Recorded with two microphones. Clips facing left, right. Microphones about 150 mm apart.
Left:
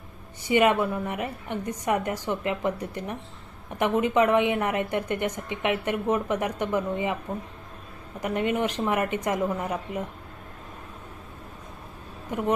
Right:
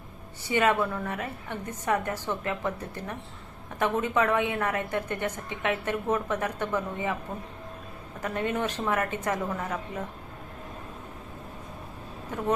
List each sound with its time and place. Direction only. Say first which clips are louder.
0.4 s a woman's voice: left 3 dB; 20° left (ahead or behind)
8.2 s a woman's voice: left 3 dB; 15° left (ahead or behind)